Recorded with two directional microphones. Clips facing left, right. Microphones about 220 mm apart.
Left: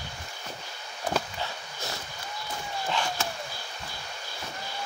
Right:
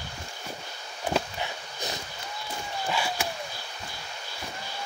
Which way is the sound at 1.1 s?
15° right (ahead or behind).